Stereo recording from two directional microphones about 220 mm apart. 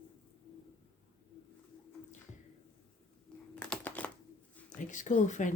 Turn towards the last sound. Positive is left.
turn(degrees=35)  # may be behind; listen again after turning